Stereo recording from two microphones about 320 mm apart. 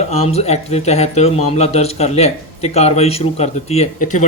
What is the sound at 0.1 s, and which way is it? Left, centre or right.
A man's voice, centre.